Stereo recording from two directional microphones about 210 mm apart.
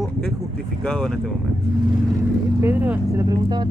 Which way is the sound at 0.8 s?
Centre (ahead or behind).